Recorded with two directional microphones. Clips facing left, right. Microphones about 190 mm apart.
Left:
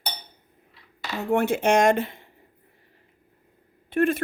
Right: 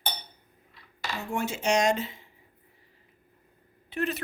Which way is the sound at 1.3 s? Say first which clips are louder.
Left 7 dB; 60° left (ahead or behind).